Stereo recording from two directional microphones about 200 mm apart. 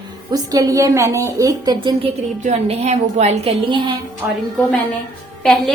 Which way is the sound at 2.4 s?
35° right (ahead or behind).